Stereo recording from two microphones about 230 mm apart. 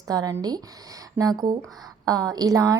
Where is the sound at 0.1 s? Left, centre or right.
Centre.